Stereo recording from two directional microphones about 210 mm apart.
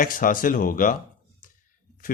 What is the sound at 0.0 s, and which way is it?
Speech, 40° left (ahead or behind).